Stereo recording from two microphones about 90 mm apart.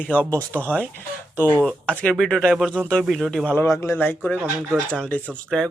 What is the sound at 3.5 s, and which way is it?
Speech, 30° left (ahead or behind).